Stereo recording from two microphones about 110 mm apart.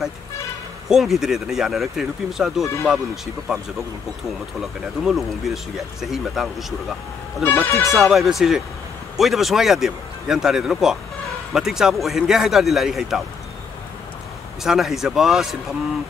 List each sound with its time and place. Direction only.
0.8 s speech: 5° right (ahead or behind)
2.6 s speech: 25° left (ahead or behind)
4.6 s speech: centre (ahead or behind)
7.4 s speech: 15° left (ahead or behind)
8.1 s speech: centre (ahead or behind)
14.6 s speech: 5° right (ahead or behind)